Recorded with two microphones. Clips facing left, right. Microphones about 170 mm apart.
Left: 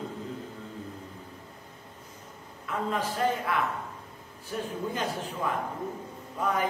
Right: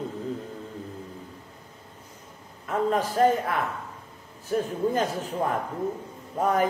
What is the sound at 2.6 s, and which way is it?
A man's voice, 45° right (ahead or behind).